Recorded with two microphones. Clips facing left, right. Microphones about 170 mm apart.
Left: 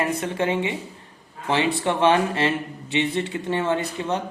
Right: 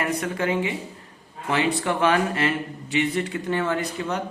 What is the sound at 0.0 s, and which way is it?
Speech, 25° left (ahead or behind).